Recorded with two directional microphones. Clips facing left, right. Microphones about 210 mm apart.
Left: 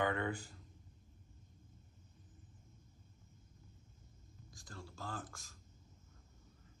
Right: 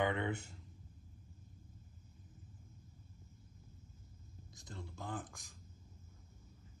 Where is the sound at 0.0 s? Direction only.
20° right (ahead or behind).